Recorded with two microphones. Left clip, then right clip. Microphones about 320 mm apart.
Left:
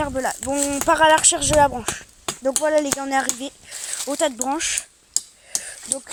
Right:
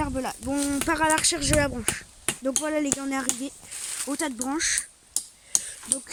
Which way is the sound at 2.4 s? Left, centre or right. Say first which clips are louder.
Left 8 dB; left.